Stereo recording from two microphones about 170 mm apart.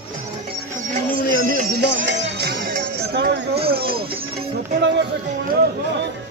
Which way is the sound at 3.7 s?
65° right (ahead or behind).